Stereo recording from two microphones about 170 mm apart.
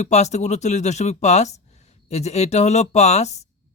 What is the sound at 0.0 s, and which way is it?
Speech, 40° left (ahead or behind).